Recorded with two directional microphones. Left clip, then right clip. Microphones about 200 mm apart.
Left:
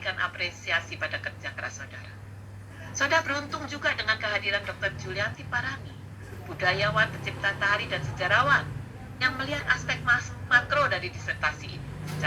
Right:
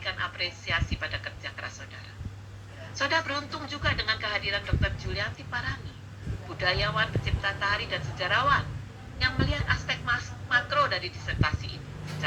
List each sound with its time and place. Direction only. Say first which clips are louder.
0.0 s speech: left 2 dB; 25° left (ahead or behind)
3.0 s speech: left 2 dB; 25° left (ahead or behind)